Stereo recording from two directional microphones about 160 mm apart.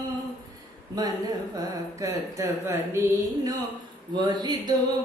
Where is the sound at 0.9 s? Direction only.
25° right (ahead or behind).